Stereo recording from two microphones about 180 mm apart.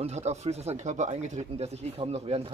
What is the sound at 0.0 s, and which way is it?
Speech, 40° right (ahead or behind).